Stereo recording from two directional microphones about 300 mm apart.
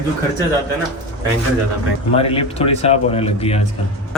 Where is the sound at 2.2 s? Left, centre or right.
Centre.